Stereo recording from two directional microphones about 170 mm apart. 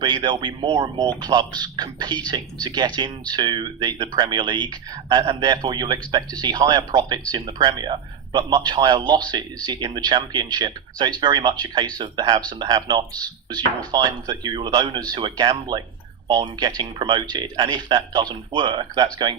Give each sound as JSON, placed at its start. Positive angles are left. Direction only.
{"t": 0.0, "sound": "speech", "side_deg": -25}